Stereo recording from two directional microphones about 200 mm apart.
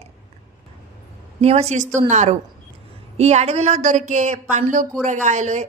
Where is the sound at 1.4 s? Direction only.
30° right (ahead or behind).